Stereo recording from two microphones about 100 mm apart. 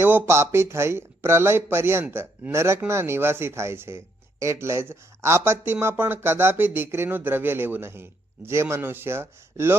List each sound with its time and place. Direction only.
0.0 s speech: 20° right (ahead or behind)